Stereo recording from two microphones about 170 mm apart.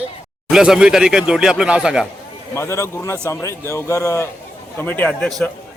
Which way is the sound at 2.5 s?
15° left (ahead or behind).